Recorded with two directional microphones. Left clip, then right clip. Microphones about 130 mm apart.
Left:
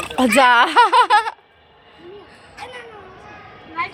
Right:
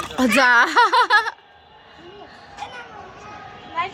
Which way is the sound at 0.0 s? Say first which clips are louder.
Left 3 dB; 5° left (ahead or behind).